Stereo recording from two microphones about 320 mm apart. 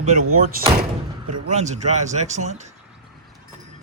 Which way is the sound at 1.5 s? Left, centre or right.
Right.